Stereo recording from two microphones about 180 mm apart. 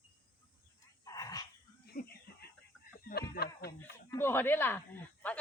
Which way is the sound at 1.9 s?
60° left (ahead or behind).